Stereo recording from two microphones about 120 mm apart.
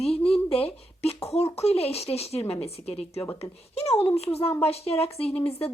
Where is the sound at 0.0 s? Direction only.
55° left (ahead or behind).